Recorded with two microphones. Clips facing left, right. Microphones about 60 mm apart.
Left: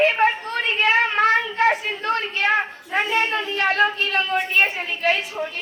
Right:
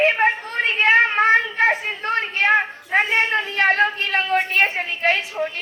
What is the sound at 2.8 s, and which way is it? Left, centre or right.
A woman's voice, right.